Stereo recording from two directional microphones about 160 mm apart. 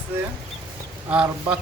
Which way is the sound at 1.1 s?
10° right (ahead or behind).